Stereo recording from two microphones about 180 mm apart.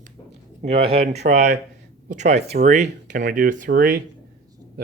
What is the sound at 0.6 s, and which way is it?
Speech, 35° right (ahead or behind).